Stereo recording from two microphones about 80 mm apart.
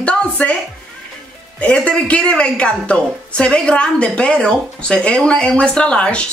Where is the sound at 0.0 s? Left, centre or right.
Centre.